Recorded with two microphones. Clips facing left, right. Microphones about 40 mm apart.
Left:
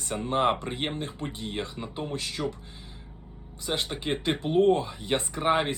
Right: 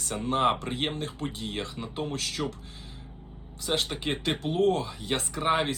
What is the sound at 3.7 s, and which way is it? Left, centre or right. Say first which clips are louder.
Speech: right 2 dB; centre.